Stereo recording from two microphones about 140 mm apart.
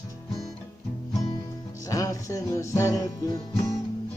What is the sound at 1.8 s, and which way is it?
Music, 25° left (ahead or behind).